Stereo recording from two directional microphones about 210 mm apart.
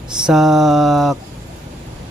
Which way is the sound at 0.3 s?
Centre (ahead or behind).